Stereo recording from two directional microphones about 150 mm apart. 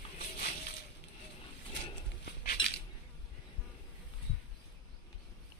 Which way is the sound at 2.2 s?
85° left.